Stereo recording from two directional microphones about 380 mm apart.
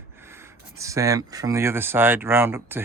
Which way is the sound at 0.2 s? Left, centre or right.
Centre.